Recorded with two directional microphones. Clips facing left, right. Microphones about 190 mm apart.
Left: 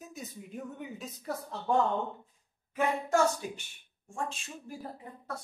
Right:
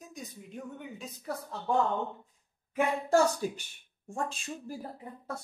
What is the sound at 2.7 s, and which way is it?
Speech, 30° right (ahead or behind).